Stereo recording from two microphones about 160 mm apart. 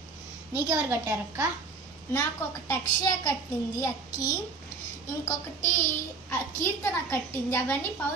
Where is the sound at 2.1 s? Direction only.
20° left (ahead or behind).